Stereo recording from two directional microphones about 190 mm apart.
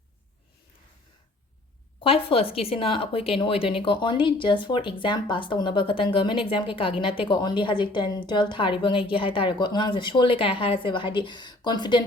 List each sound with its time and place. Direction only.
2.0 s a woman's voice: 30° left (ahead or behind)